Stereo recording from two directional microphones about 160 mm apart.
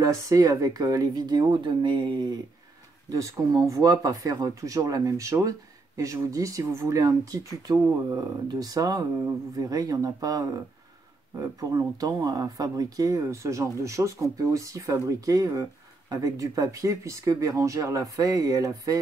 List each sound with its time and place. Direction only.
0.0 s speech: 20° right (ahead or behind)
11.7 s speech: 20° right (ahead or behind)